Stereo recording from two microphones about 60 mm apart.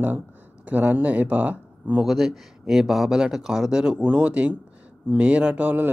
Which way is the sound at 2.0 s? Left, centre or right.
Centre.